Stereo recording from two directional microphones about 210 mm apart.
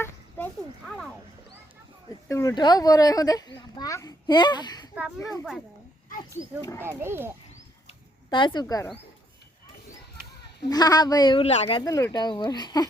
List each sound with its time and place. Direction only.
0.9 s wild animals: centre (ahead or behind)
2.2 s a child's voice: 15° left (ahead or behind)
6.6 s speech: 15° left (ahead or behind)
6.8 s speech: 10° right (ahead or behind)
8.3 s a child's voice: 20° left (ahead or behind)
10.7 s a child's voice: 20° left (ahead or behind)
11.8 s a child's voice: 15° left (ahead or behind)